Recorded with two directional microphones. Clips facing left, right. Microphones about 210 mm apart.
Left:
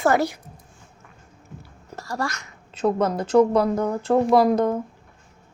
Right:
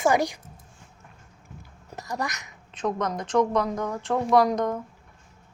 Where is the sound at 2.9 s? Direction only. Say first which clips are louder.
Left 6 dB; 30° left (ahead or behind).